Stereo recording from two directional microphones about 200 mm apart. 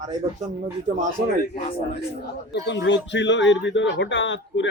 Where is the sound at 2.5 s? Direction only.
60° left (ahead or behind).